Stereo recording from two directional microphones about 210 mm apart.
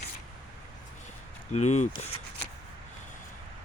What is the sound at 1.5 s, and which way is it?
Speech, 35° left (ahead or behind).